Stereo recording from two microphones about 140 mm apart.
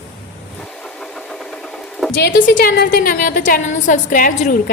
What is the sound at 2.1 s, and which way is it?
A woman's voice, 85° left.